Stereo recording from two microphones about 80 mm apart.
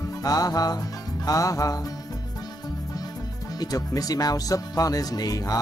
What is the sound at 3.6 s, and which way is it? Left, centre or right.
Speech, left.